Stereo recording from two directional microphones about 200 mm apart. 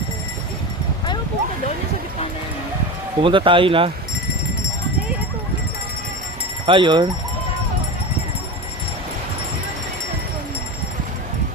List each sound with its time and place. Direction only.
3.2 s speech: 25° right (ahead or behind)
6.7 s speech: 25° right (ahead or behind)